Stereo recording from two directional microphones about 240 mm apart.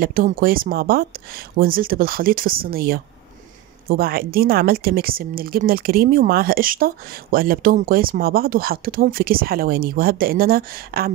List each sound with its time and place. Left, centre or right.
0.0 s speech: right